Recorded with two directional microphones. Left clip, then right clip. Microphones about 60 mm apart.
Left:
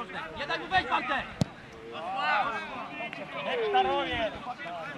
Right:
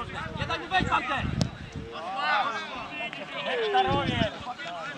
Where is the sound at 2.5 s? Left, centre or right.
Right.